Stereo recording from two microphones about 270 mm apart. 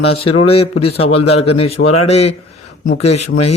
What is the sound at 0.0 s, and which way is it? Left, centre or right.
A man's voice, left.